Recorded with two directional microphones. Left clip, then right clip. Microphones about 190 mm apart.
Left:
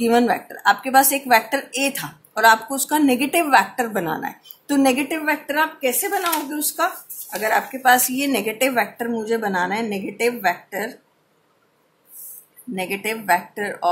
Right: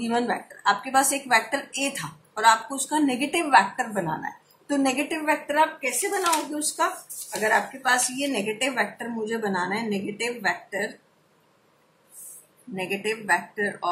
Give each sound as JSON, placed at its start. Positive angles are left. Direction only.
{"t": 0.0, "sound": "speech", "side_deg": 50}
{"t": 12.7, "sound": "speech", "side_deg": 45}